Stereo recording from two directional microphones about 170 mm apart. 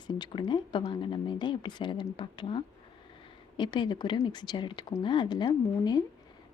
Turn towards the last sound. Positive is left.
turn(degrees=25)  # may be behind; listen again after turning